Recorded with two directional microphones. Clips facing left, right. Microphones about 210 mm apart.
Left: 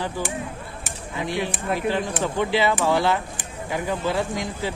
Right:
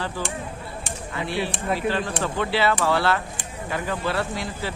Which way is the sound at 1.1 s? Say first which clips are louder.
Left 1 dB; 15° left (ahead or behind).